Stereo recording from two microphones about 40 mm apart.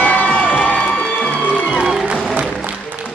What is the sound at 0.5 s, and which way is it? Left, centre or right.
Music, left.